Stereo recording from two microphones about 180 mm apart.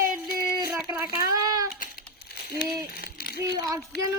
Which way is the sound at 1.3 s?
20° right (ahead or behind).